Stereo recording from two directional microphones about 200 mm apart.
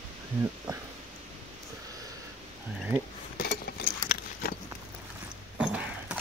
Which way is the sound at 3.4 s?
50° left (ahead or behind).